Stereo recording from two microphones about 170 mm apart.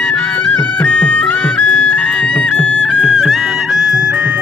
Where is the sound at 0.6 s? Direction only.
10° left (ahead or behind).